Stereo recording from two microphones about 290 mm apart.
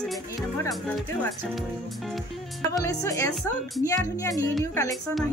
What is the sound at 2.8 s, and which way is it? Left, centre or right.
Speech, centre.